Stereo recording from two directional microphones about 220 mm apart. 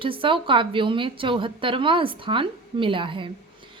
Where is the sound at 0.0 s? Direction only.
25° right (ahead or behind).